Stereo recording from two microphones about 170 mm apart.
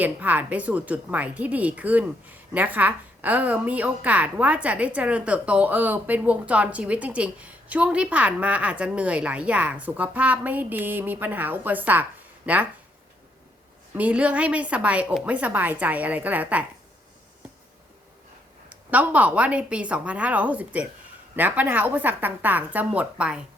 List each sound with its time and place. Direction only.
0.0 s speech: 10° right (ahead or behind)
13.9 s speech: 10° right (ahead or behind)
18.7 s speech: 10° right (ahead or behind)